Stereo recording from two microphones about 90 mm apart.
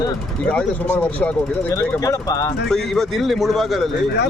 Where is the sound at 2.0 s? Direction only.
40° left (ahead or behind).